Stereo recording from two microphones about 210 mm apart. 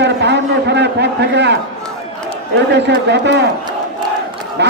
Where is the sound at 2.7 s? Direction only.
55° right (ahead or behind).